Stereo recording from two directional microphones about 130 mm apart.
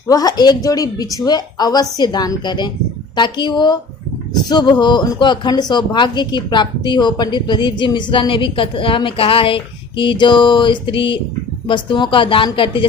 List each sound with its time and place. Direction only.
0.1 s speech: 30° left (ahead or behind)